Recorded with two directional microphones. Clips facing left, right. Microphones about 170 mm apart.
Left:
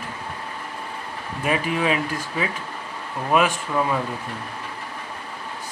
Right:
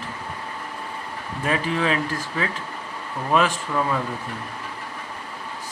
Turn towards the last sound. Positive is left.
turn(degrees=10)  # may be behind; listen again after turning